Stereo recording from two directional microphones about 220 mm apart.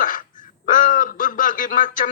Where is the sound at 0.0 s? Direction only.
35° left (ahead or behind).